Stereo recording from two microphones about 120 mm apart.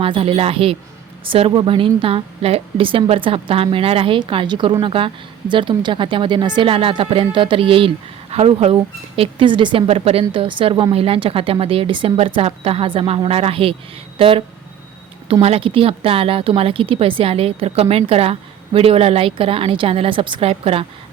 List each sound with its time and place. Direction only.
0.0 s a woman's voice: 50° right (ahead or behind)
20.5 s a woman's voice: 55° right (ahead or behind)